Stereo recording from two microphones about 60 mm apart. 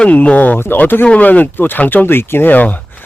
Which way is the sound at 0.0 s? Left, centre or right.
Left.